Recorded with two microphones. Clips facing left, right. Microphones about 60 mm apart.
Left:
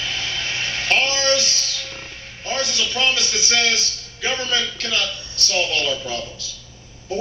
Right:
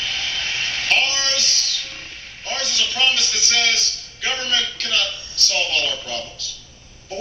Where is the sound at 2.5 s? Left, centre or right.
Centre.